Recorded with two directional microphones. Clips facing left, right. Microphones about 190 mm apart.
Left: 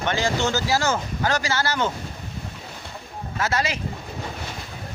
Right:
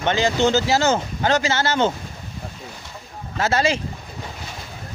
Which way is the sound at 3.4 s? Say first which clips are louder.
Right 5 dB; 30° right (ahead or behind).